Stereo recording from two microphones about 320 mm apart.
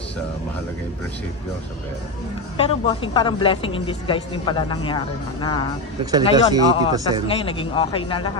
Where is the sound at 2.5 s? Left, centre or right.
Centre.